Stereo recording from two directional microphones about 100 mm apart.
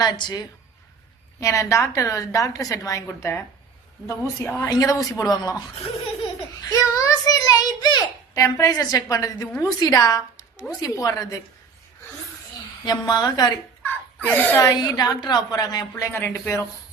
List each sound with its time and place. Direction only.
0.0 s a woman's voice: 40° left (ahead or behind)
1.4 s a woman's voice: 30° left (ahead or behind)
4.4 s a woman's voice: 30° left (ahead or behind)
6.7 s a child's voice: 35° left (ahead or behind)
12.8 s speech: 45° left (ahead or behind)
13.8 s a sound: 15° left (ahead or behind)
14.6 s a woman's voice: 40° left (ahead or behind)
16.1 s speech: 25° left (ahead or behind)